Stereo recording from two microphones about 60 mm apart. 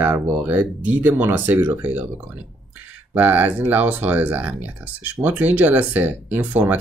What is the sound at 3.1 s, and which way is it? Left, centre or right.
Speech, right.